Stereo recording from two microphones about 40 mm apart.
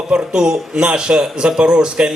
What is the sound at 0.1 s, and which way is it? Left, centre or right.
Speech, right.